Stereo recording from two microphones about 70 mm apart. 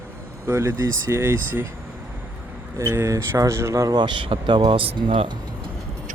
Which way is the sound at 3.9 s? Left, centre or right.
Right.